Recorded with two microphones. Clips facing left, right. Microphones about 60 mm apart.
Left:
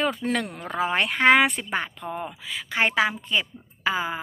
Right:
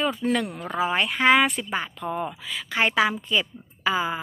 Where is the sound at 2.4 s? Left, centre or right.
Left.